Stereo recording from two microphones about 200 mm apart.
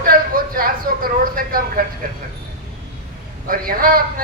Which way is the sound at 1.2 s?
45° right (ahead or behind).